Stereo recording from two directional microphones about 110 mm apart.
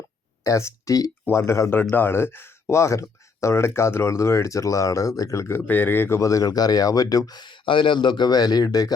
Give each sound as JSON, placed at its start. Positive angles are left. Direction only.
{"t": 0.4, "sound": "speech", "side_deg": 30}